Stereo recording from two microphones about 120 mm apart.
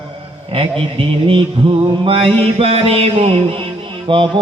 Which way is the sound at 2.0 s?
50° right (ahead or behind).